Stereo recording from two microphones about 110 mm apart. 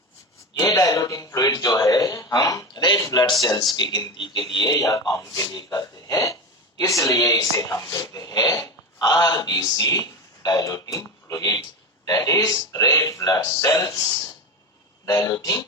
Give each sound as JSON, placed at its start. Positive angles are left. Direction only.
{"t": 0.6, "sound": "music", "side_deg": 35}
{"t": 3.4, "sound": "speech", "side_deg": 40}
{"t": 15.0, "sound": "speech", "side_deg": 35}